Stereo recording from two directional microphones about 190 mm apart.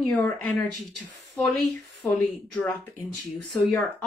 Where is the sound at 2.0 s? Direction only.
5° left (ahead or behind).